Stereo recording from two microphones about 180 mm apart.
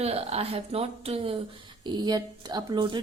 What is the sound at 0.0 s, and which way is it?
Speech, 35° right (ahead or behind).